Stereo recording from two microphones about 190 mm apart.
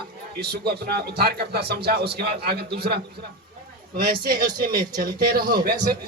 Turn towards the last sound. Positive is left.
turn(degrees=-50)  # may be behind; listen again after turning